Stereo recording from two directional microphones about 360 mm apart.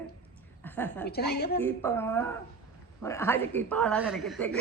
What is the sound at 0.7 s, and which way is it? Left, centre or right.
Speech, centre.